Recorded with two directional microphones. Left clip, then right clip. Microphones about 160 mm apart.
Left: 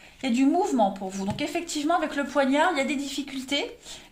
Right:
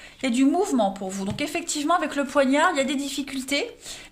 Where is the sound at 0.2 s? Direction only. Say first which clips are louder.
Right 1 dB; 65° right (ahead or behind).